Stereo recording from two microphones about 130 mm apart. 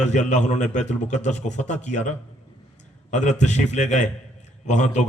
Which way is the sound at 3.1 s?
70° left (ahead or behind).